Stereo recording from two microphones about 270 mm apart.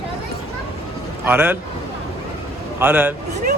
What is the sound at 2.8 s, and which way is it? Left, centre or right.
Speech, centre.